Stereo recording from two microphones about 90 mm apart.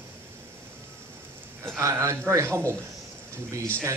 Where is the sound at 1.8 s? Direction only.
35° right (ahead or behind).